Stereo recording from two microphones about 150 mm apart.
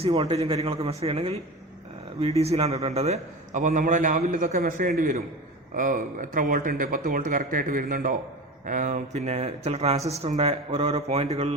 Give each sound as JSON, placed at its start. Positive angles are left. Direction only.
{"t": 0.0, "sound": "a man's voice", "side_deg": -40}
{"t": 2.4, "sound": "a man's voice", "side_deg": -45}